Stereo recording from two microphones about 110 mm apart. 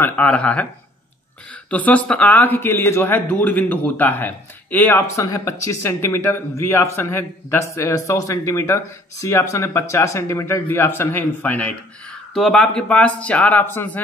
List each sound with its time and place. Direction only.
0.0 s speech: 15° left (ahead or behind)
5.2 s speech: 30° left (ahead or behind); by 11.7 s 15° left (ahead or behind)
12.4 s speech: 5° left (ahead or behind)